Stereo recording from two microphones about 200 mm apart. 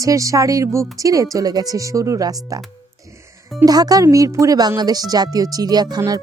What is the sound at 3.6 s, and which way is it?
Speech, 20° right (ahead or behind).